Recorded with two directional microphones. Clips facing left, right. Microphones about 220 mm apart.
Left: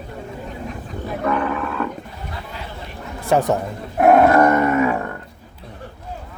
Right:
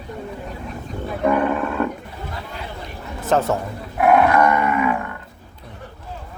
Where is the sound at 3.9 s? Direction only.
40° left (ahead or behind).